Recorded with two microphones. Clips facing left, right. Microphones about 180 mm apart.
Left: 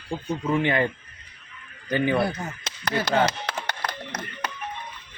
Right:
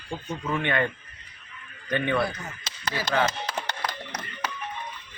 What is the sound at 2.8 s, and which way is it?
Speech, 70° left (ahead or behind).